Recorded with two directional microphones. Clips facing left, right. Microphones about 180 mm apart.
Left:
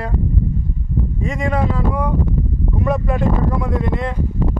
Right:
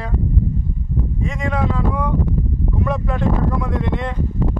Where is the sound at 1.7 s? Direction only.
10° left (ahead or behind).